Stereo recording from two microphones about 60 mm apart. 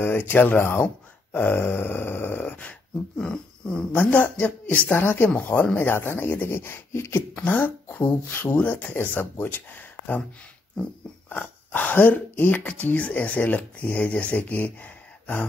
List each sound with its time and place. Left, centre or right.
0.0 s speech: left
3.2 s a sound: centre
4.0 s speech: left
5.3 s speech: left
5.8 s speech: left
7.2 s speech: left
8.9 s speech: left
11.2 s speech: left